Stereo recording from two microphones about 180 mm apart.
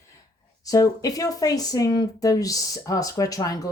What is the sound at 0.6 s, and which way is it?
Speech, 20° left (ahead or behind).